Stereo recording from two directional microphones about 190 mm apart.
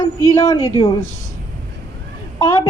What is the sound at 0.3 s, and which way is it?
Speech, 20° left (ahead or behind).